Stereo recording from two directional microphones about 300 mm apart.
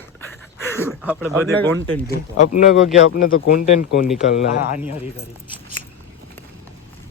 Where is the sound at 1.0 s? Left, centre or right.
Centre.